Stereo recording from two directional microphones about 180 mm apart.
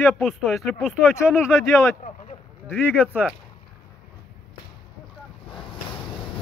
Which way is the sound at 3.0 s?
5° right (ahead or behind).